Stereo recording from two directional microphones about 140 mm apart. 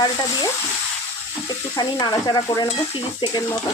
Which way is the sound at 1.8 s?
30° left (ahead or behind).